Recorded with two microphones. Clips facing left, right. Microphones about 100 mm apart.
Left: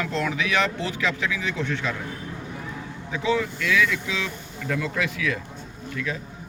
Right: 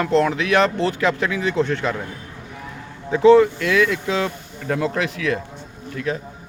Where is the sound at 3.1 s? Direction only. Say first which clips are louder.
Right 13 dB; 45° right (ahead or behind).